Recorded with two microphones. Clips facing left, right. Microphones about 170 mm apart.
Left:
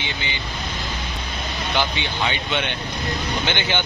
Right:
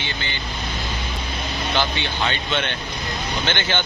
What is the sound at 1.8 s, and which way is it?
Speech, 15° left (ahead or behind).